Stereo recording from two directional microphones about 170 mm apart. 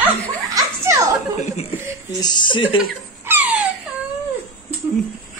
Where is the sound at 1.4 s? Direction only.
40° left (ahead or behind).